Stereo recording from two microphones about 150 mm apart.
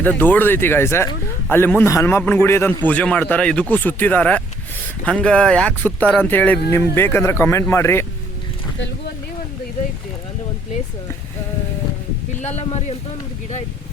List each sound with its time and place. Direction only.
0.0 s speech: 10° left (ahead or behind)
12.4 s speech: 50° left (ahead or behind)